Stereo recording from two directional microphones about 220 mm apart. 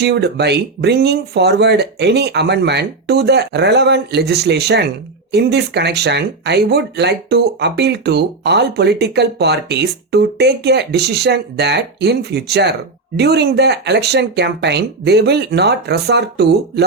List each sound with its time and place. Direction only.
0.0 s speech: 50° right (ahead or behind)